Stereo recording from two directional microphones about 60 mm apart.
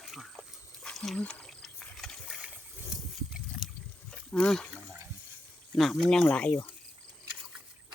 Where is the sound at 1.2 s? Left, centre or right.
Centre.